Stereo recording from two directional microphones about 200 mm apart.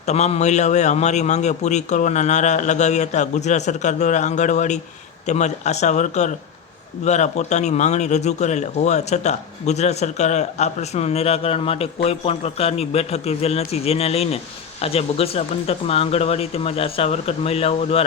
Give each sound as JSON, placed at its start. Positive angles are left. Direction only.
{"t": 0.0, "sound": "a man's voice", "side_deg": 35}